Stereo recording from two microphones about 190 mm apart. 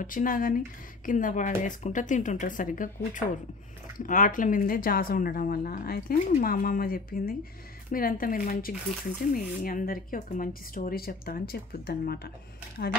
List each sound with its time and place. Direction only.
0.0 s speech: 45° left (ahead or behind)